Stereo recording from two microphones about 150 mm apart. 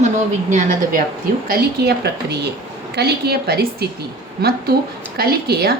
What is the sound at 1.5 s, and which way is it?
Speech, 90° right.